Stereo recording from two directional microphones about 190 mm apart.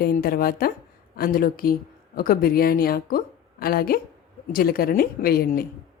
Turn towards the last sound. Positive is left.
turn(degrees=50)  # may be behind; listen again after turning